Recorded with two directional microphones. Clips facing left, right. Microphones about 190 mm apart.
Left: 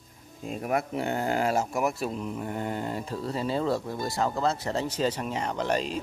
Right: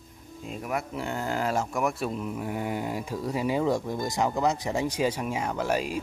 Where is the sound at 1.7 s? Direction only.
Centre (ahead or behind).